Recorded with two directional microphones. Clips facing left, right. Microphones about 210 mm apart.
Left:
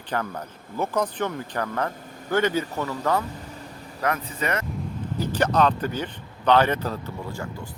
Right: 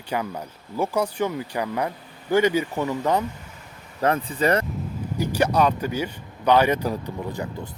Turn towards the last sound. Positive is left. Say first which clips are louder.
# right 3 dB
turn(degrees=-20)  # may be behind; listen again after turning